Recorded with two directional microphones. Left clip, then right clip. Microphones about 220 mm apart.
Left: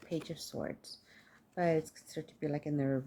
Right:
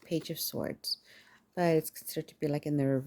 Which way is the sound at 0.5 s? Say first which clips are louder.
Right 5 dB; 45° right (ahead or behind).